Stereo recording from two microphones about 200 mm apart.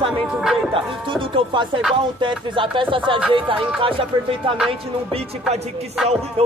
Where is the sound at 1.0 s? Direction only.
25° right (ahead or behind).